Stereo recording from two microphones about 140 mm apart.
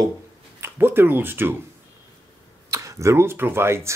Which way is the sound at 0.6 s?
15° right (ahead or behind).